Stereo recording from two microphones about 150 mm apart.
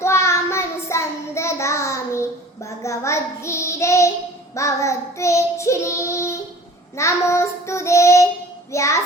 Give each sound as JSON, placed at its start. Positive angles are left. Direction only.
{"t": 0.0, "sound": "child singing", "side_deg": 20}